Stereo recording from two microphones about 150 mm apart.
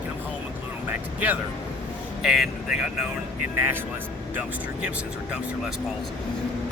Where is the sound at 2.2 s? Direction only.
5° right (ahead or behind).